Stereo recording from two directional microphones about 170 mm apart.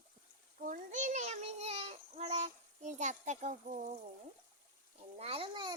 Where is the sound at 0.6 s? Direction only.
50° right (ahead or behind).